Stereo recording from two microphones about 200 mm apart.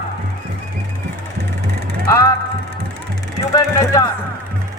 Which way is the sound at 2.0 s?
15° left (ahead or behind).